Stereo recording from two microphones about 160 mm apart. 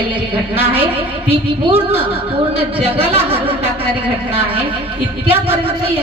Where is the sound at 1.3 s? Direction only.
40° right (ahead or behind).